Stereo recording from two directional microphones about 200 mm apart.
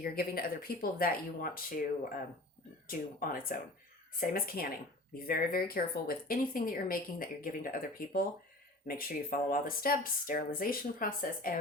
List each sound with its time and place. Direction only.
0.0 s speech: 50° left (ahead or behind)
2.8 s speech: 45° left (ahead or behind)